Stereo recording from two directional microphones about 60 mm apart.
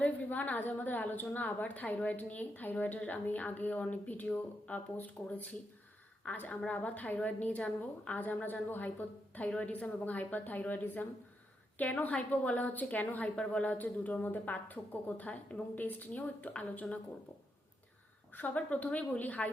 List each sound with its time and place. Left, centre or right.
0.0 s a woman's voice: left
18.3 s a woman's voice: left